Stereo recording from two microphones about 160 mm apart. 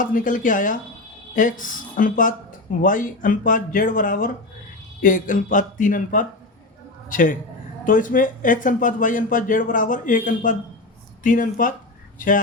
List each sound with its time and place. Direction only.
0.0 s speech: 55° left (ahead or behind)